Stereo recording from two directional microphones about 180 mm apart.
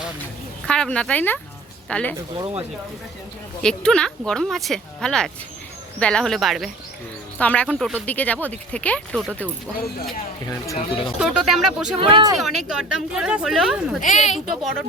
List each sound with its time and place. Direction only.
0.7 s speech: 5° left (ahead or behind)
2.3 s speech: 30° right (ahead or behind)
3.6 s speech: 5° left (ahead or behind)
10.8 s speech: 30° left (ahead or behind)
11.2 s speech: 5° right (ahead or behind)
11.9 s speech: 30° right (ahead or behind)
12.4 s speech: centre (ahead or behind)
14.0 s a woman's voice: 40° left (ahead or behind)
14.3 s speech: centre (ahead or behind)